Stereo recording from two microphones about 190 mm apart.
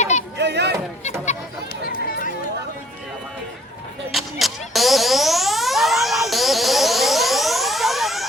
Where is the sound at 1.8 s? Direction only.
50° left (ahead or behind).